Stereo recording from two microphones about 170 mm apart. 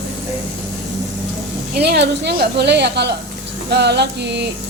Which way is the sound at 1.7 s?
80° right.